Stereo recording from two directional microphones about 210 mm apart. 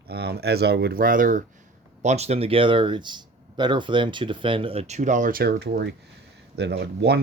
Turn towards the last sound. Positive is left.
turn(degrees=-50)  # may be behind; listen again after turning